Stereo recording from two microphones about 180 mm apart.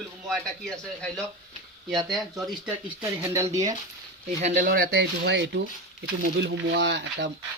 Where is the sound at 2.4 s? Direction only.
5° right (ahead or behind).